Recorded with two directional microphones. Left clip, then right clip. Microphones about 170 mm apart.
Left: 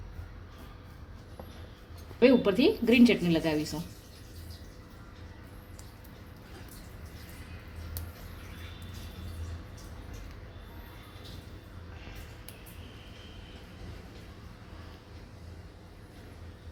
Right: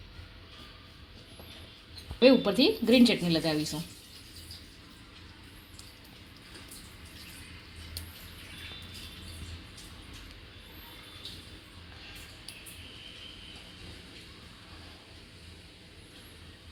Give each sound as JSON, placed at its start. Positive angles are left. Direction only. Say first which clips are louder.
{"t": 2.1, "sound": "a woman's voice", "louder": "right 1 dB", "side_deg": -30}